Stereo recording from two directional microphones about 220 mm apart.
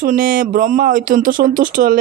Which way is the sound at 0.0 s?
40° right (ahead or behind).